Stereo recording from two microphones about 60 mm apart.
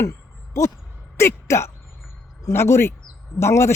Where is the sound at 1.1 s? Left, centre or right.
Left.